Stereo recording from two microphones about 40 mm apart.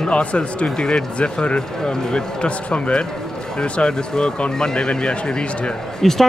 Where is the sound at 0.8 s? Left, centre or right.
Centre.